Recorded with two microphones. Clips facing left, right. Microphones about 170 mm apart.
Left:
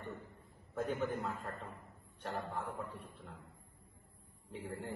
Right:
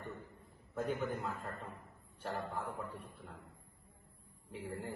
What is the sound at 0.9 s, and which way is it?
A man's voice, centre (ahead or behind).